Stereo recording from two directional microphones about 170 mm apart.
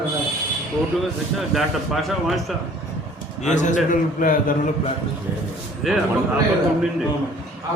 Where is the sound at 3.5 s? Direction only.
45° left (ahead or behind).